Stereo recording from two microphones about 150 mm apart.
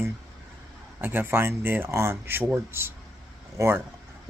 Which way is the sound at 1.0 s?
15° right (ahead or behind).